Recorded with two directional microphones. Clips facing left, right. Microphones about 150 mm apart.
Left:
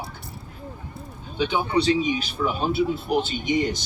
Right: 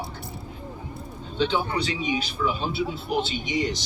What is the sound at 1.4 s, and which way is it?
Speech, 15° left (ahead or behind).